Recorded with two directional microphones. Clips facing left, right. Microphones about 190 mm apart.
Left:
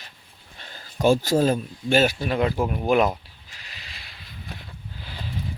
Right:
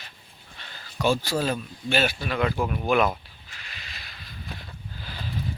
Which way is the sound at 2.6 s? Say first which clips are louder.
Left 2 dB; 25° left (ahead or behind).